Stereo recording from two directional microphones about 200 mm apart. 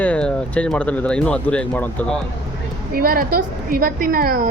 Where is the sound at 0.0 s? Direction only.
5° left (ahead or behind).